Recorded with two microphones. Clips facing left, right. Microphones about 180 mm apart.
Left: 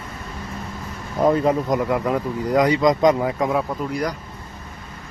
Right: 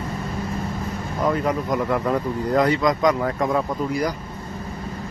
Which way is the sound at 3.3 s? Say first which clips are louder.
Left 1 dB; 10° left (ahead or behind).